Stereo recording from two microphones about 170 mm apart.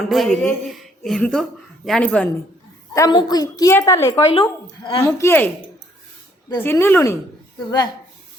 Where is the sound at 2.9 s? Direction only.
25° left (ahead or behind).